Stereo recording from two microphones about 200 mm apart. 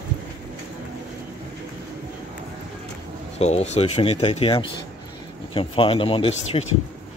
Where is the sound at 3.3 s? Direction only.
30° left (ahead or behind).